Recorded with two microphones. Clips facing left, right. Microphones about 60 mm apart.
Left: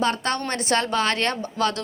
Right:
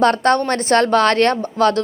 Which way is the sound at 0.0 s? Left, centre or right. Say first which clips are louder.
Right 9 dB; right.